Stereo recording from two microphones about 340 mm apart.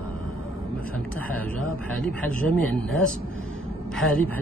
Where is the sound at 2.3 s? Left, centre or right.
Right.